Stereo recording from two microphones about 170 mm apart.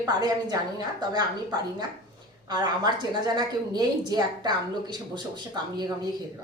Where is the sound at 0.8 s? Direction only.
25° right (ahead or behind).